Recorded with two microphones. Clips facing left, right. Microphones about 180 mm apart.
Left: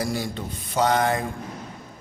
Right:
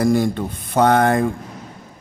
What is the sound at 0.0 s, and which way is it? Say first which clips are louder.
Speech: right 10 dB; 55° right (ahead or behind).